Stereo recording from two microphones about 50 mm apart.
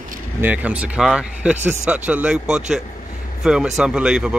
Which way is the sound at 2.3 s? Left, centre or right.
Centre.